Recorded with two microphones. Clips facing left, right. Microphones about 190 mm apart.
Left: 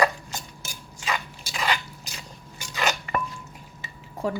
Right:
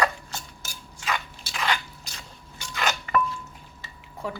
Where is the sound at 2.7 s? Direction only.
10° left (ahead or behind).